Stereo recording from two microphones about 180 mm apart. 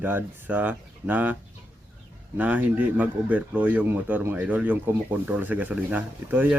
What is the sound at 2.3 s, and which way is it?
Speech, 10° right (ahead or behind).